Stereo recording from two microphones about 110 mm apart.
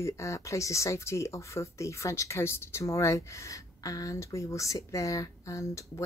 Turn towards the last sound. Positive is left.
turn(degrees=30)  # may be behind; listen again after turning